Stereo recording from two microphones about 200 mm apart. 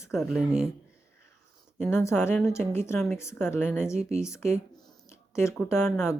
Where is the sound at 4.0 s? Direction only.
35° right (ahead or behind).